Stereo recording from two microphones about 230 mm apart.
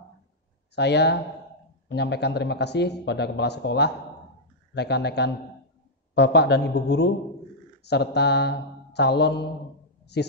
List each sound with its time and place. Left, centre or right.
0.7 s a man's voice: left